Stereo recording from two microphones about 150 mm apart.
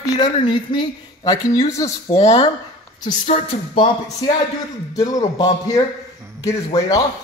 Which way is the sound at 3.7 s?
35° left (ahead or behind).